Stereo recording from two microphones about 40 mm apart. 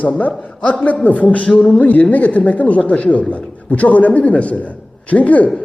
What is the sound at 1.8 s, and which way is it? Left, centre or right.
A man's voice, left.